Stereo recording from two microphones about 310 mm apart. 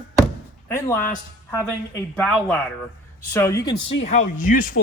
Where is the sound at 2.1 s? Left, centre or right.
Centre.